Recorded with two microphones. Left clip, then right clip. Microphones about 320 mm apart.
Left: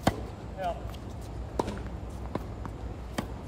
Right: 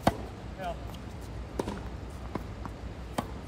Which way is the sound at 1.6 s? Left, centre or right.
Centre.